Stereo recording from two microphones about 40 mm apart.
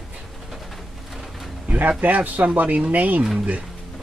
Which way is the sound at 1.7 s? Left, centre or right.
Right.